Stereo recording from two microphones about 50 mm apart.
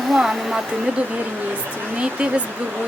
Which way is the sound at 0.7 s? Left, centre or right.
Right.